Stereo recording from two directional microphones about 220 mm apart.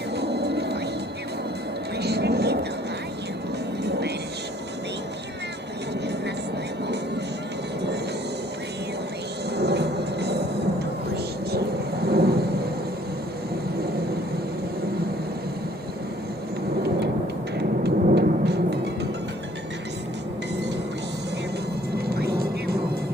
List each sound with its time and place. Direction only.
0.2 s a sound: 50° right (ahead or behind)
2.0 s a sound: 50° right (ahead or behind)
3.8 s music: 50° right (ahead or behind)
9.6 s music: 50° right (ahead or behind)
11.1 s thunder: 45° right (ahead or behind)
17.6 s thunder: 50° right (ahead or behind)
21.9 s vehicle: 45° right (ahead or behind)